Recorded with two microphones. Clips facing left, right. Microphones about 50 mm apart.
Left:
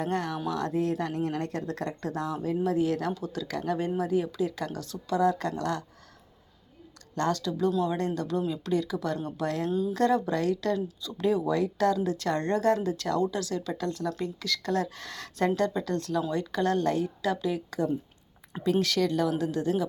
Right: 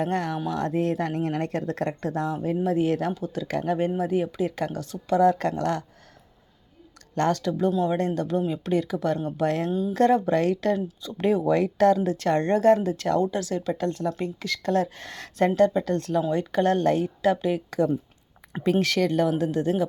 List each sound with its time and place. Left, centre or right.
0.0 s speech: right
2.3 s speech: right
3.1 s speech: right
7.2 s speech: right
9.6 s speech: centre
9.9 s speech: right